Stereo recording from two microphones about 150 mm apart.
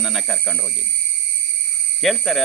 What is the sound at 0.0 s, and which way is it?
Speech, centre (ahead or behind).